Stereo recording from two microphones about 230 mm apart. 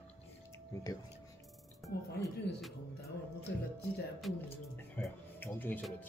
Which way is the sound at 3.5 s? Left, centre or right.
Left.